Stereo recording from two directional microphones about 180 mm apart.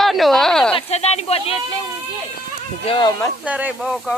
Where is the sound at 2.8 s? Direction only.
25° left (ahead or behind).